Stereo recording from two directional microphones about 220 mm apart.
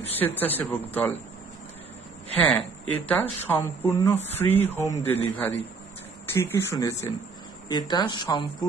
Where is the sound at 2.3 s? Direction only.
5° left (ahead or behind).